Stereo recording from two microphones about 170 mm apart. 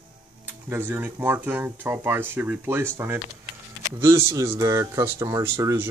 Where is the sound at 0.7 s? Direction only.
15° right (ahead or behind).